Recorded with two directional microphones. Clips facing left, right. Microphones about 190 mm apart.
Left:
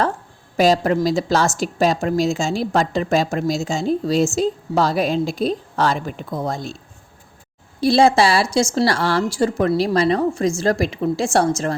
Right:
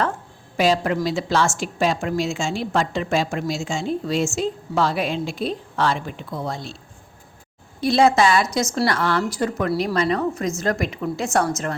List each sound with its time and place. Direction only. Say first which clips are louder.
0.5 s a woman's voice: left 4 dB; 40° left (ahead or behind)
7.8 s a woman's voice: left 2 dB; 35° left (ahead or behind)